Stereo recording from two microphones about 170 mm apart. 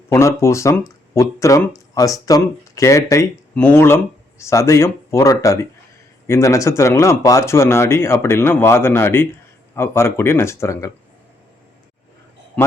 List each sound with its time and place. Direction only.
0.1 s speech: 15° left (ahead or behind)
12.6 s speech: 5° left (ahead or behind)